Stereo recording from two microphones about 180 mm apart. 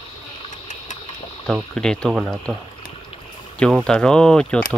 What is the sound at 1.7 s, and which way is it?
Speech, 5° left (ahead or behind).